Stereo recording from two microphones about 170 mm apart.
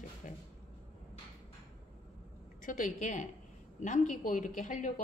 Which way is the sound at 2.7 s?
50° left (ahead or behind).